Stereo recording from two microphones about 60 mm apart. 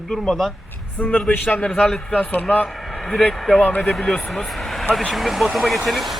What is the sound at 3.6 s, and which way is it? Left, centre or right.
Speech, left.